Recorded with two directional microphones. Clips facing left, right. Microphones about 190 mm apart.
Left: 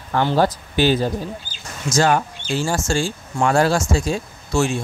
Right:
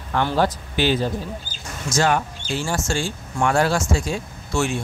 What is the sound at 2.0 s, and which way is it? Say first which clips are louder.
Speech: left 3 dB; 40° left (ahead or behind).